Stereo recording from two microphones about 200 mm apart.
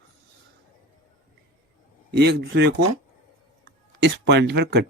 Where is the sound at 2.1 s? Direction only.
55° right (ahead or behind).